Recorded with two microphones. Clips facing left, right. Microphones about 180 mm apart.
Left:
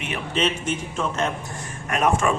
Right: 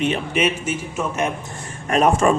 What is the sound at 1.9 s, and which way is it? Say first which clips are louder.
Speech: right 5 dB; 30° right (ahead or behind).